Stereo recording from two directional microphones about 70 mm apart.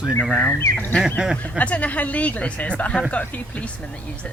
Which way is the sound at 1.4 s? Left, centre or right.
Left.